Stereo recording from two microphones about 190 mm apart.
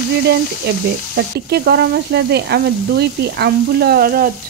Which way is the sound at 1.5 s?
60° right (ahead or behind).